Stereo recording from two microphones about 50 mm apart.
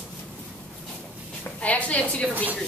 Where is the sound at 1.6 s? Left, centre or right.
Left.